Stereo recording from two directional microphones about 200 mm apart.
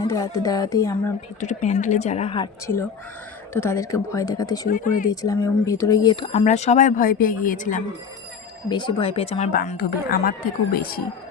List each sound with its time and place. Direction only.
0.0 s speech: 15° left (ahead or behind)
1.4 s speech: 35° left (ahead or behind)
3.5 s speech: 15° left (ahead or behind)
4.7 s speech: 40° left (ahead or behind)
5.0 s speech: 20° left (ahead or behind)
6.3 s speech: 35° left (ahead or behind)
8.7 s speech: 25° left (ahead or behind)
9.5 s a woman's voice: 45° left (ahead or behind)